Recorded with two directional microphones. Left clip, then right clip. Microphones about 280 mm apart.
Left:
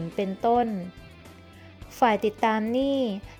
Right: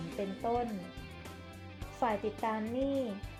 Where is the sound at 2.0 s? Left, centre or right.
Left.